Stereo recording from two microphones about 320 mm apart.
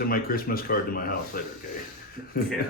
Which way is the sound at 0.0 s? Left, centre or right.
Left.